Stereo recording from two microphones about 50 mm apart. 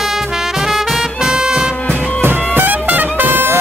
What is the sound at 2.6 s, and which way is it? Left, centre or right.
Music, right.